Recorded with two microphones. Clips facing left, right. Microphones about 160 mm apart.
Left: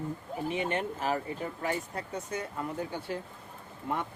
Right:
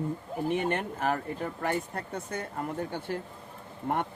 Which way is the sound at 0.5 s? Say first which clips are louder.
Right 2 dB; 55° right (ahead or behind).